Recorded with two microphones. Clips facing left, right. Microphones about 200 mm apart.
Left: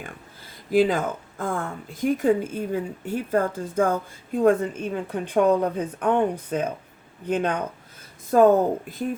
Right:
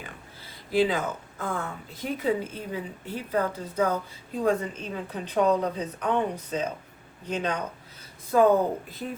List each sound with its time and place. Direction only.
0.7 s speech: 50° left (ahead or behind)